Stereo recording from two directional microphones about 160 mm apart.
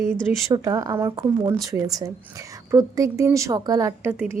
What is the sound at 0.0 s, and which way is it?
A woman's voice, 20° right (ahead or behind).